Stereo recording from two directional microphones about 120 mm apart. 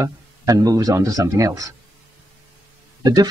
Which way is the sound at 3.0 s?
30° right (ahead or behind).